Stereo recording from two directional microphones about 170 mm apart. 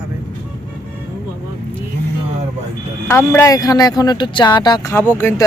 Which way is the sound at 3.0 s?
15° left (ahead or behind).